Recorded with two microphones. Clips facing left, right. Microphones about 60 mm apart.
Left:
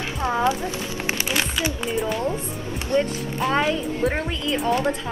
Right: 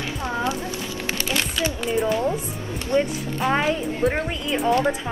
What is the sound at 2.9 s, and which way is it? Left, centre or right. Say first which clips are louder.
Speech: even; right.